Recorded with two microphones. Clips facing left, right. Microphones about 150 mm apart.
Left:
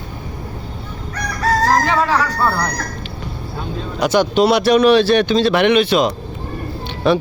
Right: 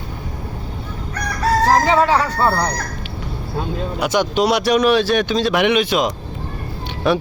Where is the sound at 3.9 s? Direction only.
10° right (ahead or behind).